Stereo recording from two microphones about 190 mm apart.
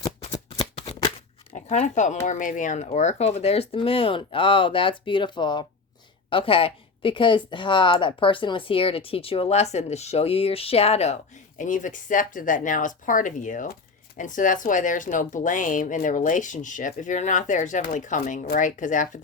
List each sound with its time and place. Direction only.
0.5 s shuffling cards: 30° left (ahead or behind)
1.5 s speech: 40° left (ahead or behind)